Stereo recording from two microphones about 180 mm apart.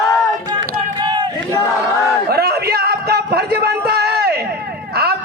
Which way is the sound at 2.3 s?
60° right (ahead or behind).